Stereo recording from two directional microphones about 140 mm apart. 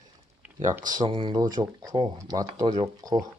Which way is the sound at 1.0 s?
35° right (ahead or behind).